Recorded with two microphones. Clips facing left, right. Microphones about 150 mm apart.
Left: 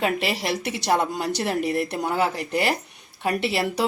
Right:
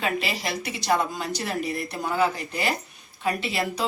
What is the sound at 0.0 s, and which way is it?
Speech, 65° left (ahead or behind).